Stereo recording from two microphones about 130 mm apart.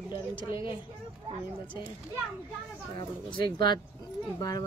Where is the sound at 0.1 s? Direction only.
35° left (ahead or behind).